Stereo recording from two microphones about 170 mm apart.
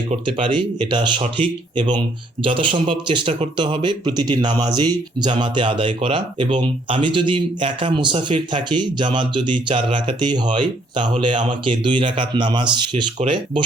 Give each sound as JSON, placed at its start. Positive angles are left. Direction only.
{"t": 0.3, "sound": "speech", "side_deg": -30}